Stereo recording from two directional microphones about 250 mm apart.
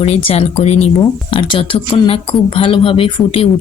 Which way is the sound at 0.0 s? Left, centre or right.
Left.